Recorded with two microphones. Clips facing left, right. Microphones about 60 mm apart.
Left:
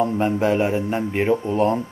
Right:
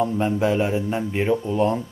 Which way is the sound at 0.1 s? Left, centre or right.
Centre.